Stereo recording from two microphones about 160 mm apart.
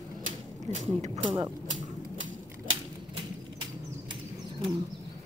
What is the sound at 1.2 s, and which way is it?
Speech, 25° right (ahead or behind).